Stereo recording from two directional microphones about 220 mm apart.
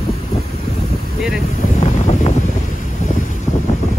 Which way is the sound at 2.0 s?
35° left (ahead or behind).